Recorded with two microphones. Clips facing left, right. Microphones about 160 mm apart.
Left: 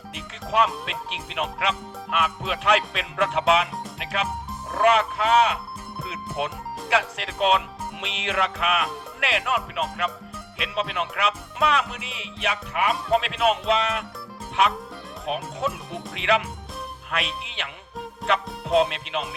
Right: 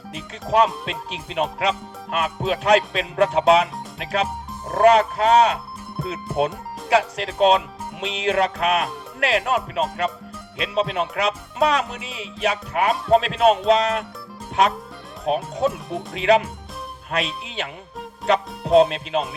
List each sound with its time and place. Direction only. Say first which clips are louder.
0.9 s speech: right 3 dB; 35° right (ahead or behind)